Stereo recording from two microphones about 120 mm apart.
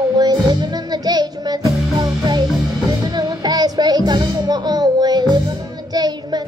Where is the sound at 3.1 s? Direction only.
35° right (ahead or behind).